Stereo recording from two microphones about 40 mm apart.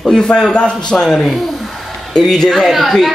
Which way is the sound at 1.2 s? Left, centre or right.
Centre.